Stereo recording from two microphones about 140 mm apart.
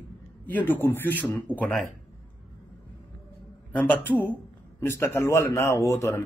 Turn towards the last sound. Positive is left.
turn(degrees=20)  # may be behind; listen again after turning